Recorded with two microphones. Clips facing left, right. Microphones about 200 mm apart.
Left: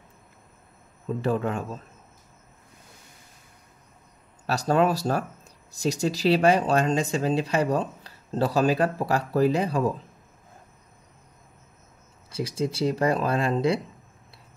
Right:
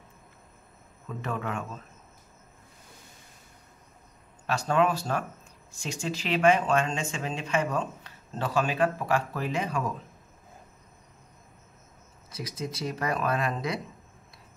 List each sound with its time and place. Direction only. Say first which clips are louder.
1.0 s speech: left 8 dB; 30° left (ahead or behind)
4.5 s speech: left 3 dB; 40° left (ahead or behind)
12.3 s speech: left 8 dB; 30° left (ahead or behind)